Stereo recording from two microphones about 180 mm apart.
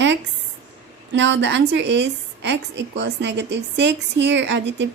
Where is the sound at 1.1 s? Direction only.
85° right.